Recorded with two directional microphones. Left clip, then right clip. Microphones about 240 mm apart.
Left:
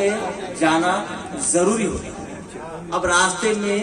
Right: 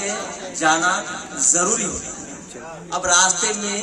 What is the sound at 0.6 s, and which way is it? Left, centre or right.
A man's voice, right.